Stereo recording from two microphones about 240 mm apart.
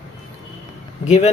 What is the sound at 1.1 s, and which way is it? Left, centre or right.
Speech, left.